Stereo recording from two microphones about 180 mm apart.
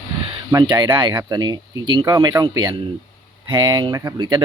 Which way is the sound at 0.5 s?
20° right (ahead or behind).